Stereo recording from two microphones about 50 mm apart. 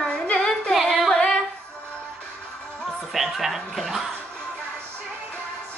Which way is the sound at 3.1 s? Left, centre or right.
Centre.